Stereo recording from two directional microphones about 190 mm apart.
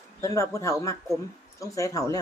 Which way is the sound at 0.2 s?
15° left (ahead or behind).